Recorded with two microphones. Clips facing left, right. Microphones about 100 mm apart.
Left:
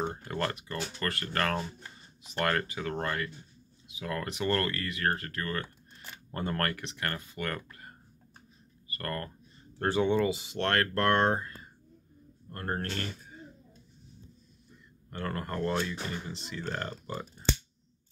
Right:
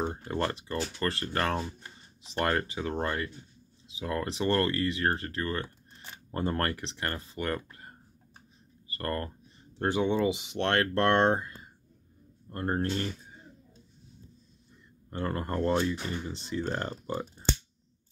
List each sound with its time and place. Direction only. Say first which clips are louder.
0.1 s speech: right 2 dB; 20° right (ahead or behind)
11.1 s speech: right 2 dB; 5° right (ahead or behind)
15.0 s speech: right 3 dB; 25° right (ahead or behind)
16.3 s speech: right 5 dB; 30° right (ahead or behind)